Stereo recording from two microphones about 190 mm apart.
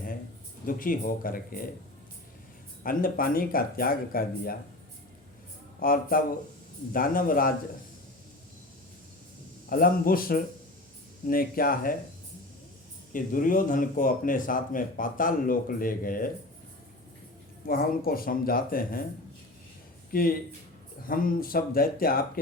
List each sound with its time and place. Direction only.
0.6 s speech: 45° left (ahead or behind)
2.8 s speech: 50° left (ahead or behind)
5.8 s speech: 50° left (ahead or behind)
9.6 s speech: 50° left (ahead or behind)
13.1 s speech: 45° left (ahead or behind)
17.7 s speech: 50° left (ahead or behind)
20.1 s speech: 50° left (ahead or behind)